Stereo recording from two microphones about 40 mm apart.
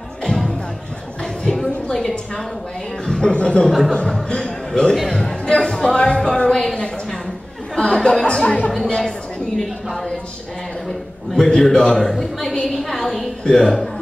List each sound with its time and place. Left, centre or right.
0.3 s music: left
1.2 s a sound: centre
3.1 s speech: centre
3.3 s speech: left
3.6 s speech: centre
4.4 s a sound: centre
5.1 s speech: centre
5.6 s music: centre
5.9 s speech: left
10.9 s a sound: centre
12.0 s a woman's voice: centre
12.7 s a sound: centre
13.4 s speech: centre